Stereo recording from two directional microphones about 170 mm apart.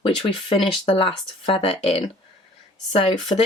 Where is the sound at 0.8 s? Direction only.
30° left (ahead or behind).